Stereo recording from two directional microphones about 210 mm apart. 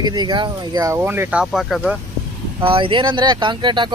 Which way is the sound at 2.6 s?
25° right (ahead or behind).